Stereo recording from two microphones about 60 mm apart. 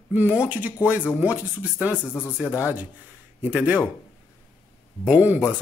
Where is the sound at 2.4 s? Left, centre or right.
Centre.